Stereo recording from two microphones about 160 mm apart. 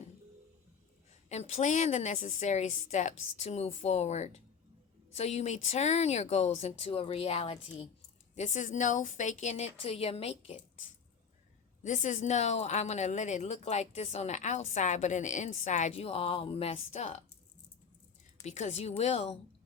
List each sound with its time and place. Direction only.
1.3 s a woman's voice: 45° left (ahead or behind)
11.8 s a woman's voice: 50° left (ahead or behind)
18.4 s speech: 45° left (ahead or behind)